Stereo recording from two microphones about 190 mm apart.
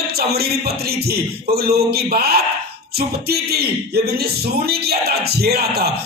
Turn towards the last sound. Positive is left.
turn(degrees=-55)  # may be behind; listen again after turning